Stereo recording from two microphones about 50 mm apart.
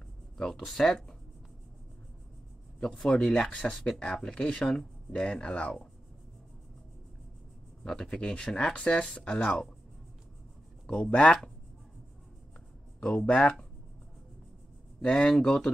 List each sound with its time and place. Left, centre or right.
0.7 s speech: centre
2.9 s speech: centre
3.3 s speech: centre
7.8 s speech: centre
10.9 s speech: left
13.0 s speech: left
15.0 s speech: centre